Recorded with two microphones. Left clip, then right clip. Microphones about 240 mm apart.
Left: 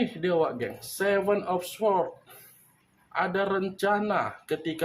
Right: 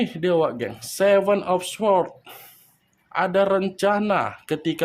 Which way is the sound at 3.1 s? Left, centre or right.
Right.